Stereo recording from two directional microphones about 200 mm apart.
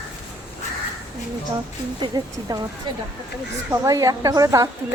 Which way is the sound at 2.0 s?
20° right (ahead or behind).